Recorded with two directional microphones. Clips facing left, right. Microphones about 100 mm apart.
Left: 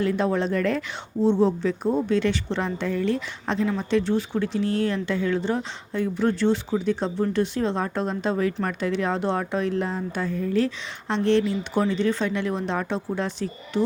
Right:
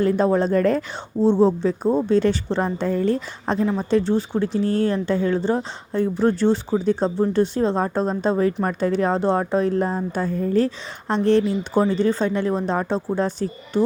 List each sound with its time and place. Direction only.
0.0 s a woman's voice: 35° right (ahead or behind)